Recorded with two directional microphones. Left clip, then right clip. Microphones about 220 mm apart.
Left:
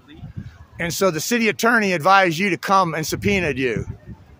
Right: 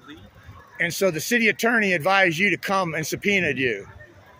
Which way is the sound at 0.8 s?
25° left (ahead or behind).